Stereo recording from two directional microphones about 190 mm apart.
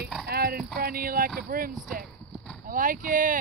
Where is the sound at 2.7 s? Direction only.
45° right (ahead or behind).